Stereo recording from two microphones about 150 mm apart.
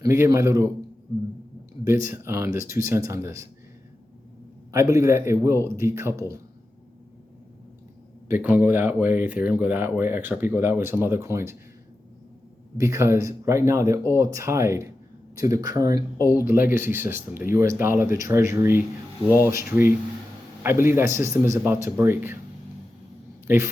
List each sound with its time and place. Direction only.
0.0 s speech: 20° right (ahead or behind)
2.0 s speech: 15° right (ahead or behind)
4.7 s speech: 20° right (ahead or behind)
8.3 s speech: 10° right (ahead or behind)
12.7 s speech: 20° right (ahead or behind)
23.5 s speech: 15° right (ahead or behind)